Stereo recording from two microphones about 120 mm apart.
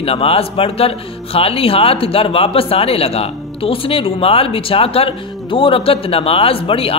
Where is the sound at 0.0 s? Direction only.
55° left (ahead or behind).